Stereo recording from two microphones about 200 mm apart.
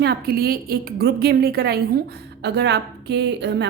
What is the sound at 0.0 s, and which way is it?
A woman's voice, 50° right (ahead or behind).